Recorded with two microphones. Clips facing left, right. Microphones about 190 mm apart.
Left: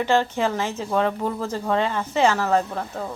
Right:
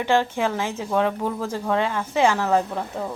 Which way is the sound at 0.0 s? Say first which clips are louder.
Even; 15° right (ahead or behind).